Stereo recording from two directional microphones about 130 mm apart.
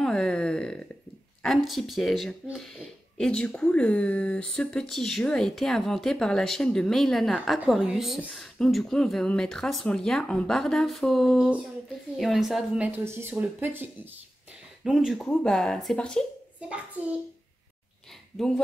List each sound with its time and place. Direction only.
0.0 s a sound: 5° left (ahead or behind)
1.4 s speech: centre (ahead or behind); by 13.8 s 15° right (ahead or behind)
14.8 s speech: 5° right (ahead or behind)
17.0 s speech: 10° right (ahead or behind)